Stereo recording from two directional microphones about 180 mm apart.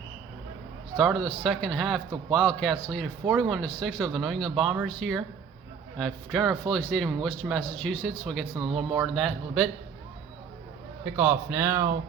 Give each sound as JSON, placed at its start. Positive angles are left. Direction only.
{"t": 0.9, "sound": "speech", "side_deg": 0}
{"t": 11.0, "sound": "a man's voice", "side_deg": -10}